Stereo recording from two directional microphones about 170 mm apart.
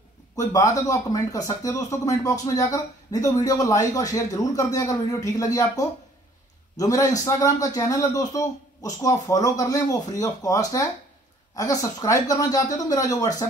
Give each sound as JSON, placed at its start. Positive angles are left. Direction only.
{"t": 0.4, "sound": "speech", "side_deg": 20}